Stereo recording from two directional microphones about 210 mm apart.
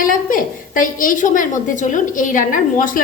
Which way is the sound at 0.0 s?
40° left (ahead or behind).